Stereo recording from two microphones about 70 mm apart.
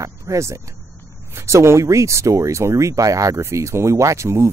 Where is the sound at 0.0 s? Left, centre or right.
Right.